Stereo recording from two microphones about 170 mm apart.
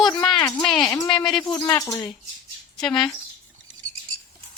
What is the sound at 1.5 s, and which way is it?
Speech, 20° left (ahead or behind).